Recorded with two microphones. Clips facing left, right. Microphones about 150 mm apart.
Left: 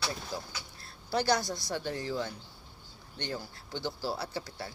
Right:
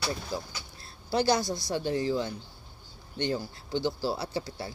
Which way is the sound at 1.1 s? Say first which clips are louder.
Right 3 dB; 25° right (ahead or behind).